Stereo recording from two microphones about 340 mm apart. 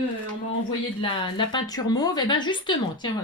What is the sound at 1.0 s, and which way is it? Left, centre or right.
Speech, centre.